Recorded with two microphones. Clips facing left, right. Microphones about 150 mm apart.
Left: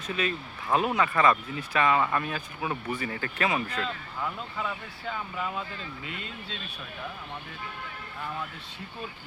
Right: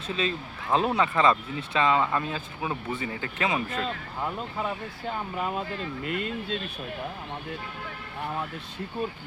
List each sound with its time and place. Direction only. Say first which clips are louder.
0.1 s speech: right 1 dB; 25° right (ahead or behind)
3.8 s speech: right 2 dB; 35° right (ahead or behind); by 6.6 s 55° right (ahead or behind)